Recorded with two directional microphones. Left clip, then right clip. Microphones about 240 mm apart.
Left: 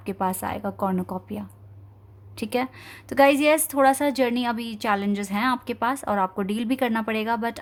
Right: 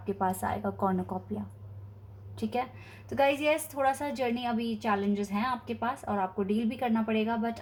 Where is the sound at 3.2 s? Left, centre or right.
Left.